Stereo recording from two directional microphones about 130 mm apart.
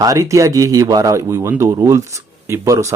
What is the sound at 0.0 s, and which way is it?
Speech, 25° right (ahead or behind).